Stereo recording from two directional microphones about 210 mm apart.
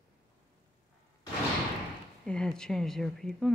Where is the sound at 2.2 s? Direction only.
5° left (ahead or behind).